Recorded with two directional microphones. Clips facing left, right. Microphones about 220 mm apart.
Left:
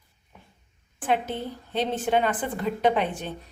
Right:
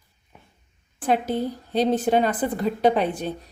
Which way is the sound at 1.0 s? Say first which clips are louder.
Right 4 dB; 40° right (ahead or behind).